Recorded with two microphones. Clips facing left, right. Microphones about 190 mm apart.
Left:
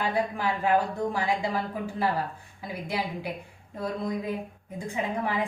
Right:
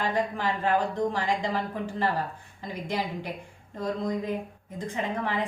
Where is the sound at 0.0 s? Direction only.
10° left (ahead or behind).